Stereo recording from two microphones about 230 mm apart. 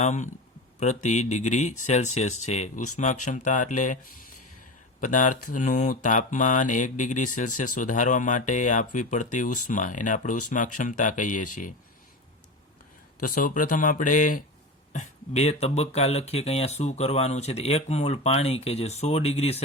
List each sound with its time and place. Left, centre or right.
0.0 s mantra: left
4.9 s speech: left
5.5 s mantra: left
13.2 s mantra: left
14.9 s speech: left